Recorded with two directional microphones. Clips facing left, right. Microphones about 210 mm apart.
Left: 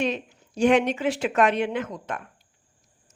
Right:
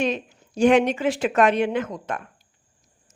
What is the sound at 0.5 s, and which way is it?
Speech, 45° right (ahead or behind).